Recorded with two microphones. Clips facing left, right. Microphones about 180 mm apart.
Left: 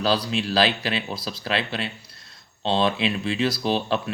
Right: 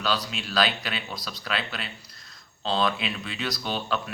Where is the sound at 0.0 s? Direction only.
35° left (ahead or behind).